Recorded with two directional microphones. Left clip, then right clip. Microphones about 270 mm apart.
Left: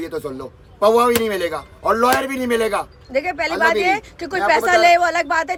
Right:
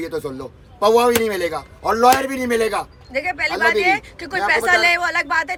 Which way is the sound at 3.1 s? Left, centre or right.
Centre.